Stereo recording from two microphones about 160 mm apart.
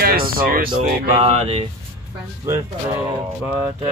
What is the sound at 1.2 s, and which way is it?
Speech, 40° right (ahead or behind).